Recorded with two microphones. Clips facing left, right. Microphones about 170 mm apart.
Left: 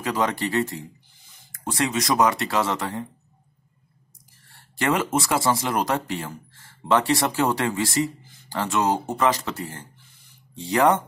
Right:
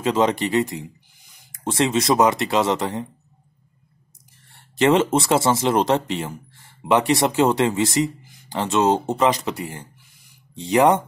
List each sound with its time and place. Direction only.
0.0 s speech: 20° right (ahead or behind)
4.5 s speech: 20° right (ahead or behind)